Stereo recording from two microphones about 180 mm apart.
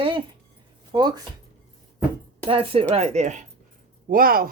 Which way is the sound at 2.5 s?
30° right (ahead or behind).